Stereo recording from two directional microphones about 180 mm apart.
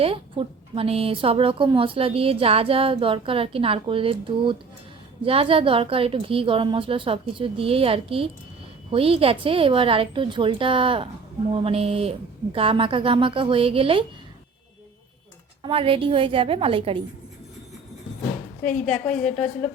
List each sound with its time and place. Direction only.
0.0 s a woman's voice: 30° right (ahead or behind)
15.6 s speech: 30° right (ahead or behind)
18.9 s a woman's voice: 5° left (ahead or behind)